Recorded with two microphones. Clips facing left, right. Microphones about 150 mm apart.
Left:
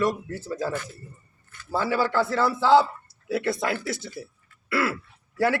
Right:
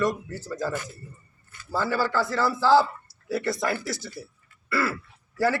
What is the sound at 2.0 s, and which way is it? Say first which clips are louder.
Speech: left 2 dB; 60° left (ahead or behind).